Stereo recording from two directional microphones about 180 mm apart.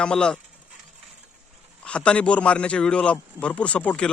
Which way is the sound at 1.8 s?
5° left (ahead or behind).